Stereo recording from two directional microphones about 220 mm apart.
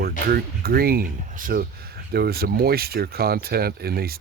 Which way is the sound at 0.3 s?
45° right (ahead or behind).